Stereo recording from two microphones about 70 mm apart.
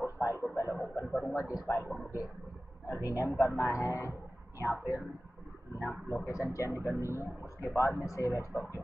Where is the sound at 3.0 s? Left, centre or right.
Left.